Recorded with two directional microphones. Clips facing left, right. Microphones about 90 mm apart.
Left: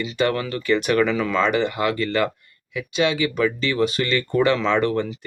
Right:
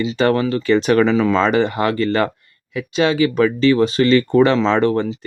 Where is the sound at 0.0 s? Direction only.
30° right (ahead or behind).